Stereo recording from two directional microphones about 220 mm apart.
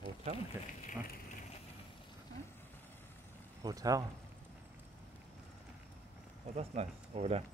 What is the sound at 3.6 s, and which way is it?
Speech, 15° right (ahead or behind).